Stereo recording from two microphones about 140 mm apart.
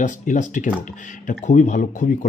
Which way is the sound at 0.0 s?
60° left (ahead or behind).